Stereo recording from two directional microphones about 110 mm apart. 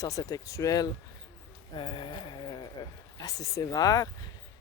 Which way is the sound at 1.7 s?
50° left (ahead or behind).